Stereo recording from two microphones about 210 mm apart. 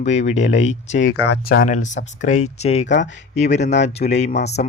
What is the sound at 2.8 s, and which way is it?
Speech, 60° left (ahead or behind).